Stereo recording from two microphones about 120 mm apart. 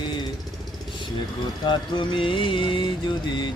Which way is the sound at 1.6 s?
40° left (ahead or behind).